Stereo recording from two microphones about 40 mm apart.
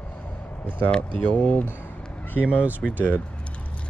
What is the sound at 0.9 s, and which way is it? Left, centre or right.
Speech, left.